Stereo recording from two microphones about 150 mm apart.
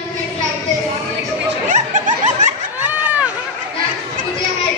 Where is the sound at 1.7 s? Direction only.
55° right (ahead or behind).